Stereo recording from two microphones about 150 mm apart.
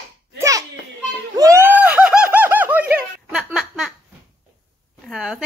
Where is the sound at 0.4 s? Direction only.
20° right (ahead or behind).